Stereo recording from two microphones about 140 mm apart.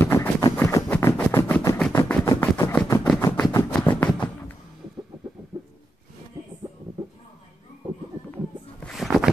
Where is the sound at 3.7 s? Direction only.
10° left (ahead or behind).